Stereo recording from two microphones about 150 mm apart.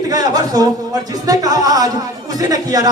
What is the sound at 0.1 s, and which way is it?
Speech, 25° right (ahead or behind).